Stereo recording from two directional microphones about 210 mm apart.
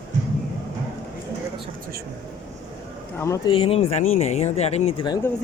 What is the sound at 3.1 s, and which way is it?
Speech, 15° left (ahead or behind).